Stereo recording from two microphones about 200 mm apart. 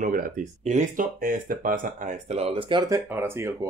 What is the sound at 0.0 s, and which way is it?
Speech, 40° right (ahead or behind).